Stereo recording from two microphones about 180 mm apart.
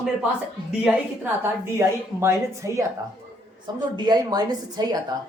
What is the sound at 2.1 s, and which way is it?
Speech, 15° right (ahead or behind).